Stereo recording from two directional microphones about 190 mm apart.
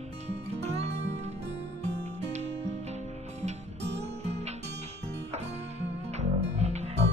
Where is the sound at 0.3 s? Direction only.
35° right (ahead or behind).